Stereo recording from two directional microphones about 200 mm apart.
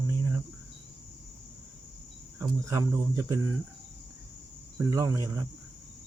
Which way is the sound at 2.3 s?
15° right (ahead or behind).